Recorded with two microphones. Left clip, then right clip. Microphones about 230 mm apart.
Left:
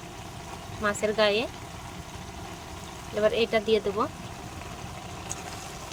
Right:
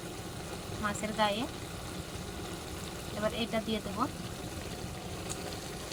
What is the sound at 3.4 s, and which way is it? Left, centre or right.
Speech, left.